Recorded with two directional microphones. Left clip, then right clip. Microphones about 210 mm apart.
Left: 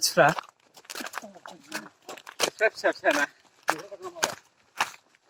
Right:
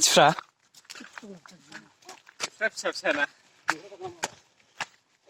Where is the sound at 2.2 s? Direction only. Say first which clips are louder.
Left 7 dB; 50° left (ahead or behind).